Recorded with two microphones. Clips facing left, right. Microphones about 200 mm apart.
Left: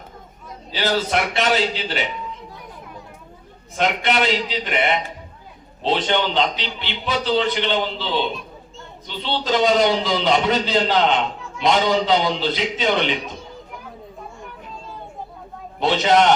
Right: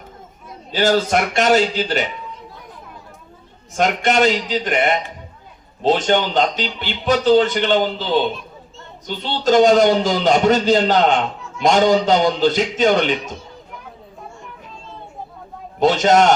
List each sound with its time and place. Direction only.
0.7 s a man's voice: 45° right (ahead or behind)
3.8 s a man's voice: 45° right (ahead or behind)
15.8 s a man's voice: 45° right (ahead or behind)